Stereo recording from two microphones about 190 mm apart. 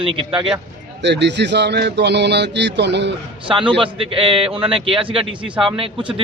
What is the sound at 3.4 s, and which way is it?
A man's voice, 25° right (ahead or behind).